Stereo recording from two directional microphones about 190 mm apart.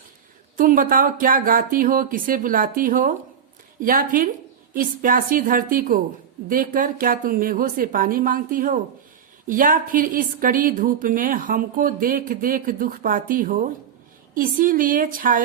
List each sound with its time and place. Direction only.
0.5 s speech: 45° right (ahead or behind)